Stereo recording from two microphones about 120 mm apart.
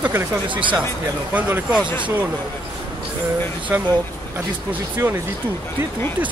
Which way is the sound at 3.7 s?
15° right (ahead or behind).